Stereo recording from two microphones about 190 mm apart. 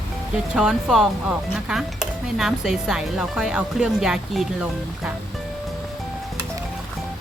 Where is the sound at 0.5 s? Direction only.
5° right (ahead or behind).